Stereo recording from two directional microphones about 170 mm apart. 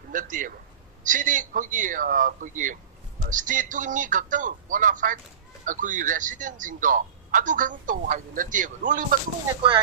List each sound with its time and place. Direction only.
0.1 s speech: 50° right (ahead or behind)
9.6 s speech: 30° right (ahead or behind)